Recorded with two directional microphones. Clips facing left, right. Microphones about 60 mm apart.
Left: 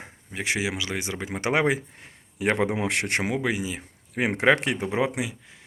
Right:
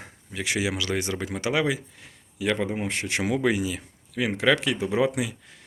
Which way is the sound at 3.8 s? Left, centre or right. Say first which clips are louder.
Left 1 dB; left.